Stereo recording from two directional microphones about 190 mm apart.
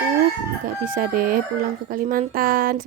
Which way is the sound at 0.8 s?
45° right (ahead or behind).